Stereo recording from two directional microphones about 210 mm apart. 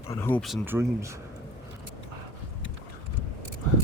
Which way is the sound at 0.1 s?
10° left (ahead or behind).